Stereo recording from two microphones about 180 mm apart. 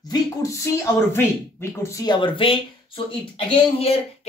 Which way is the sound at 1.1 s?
15° left (ahead or behind).